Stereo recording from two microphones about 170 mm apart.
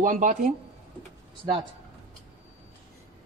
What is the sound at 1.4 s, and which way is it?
Speech, 30° right (ahead or behind).